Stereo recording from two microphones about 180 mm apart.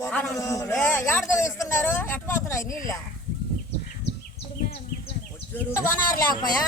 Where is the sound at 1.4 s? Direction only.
15° left (ahead or behind).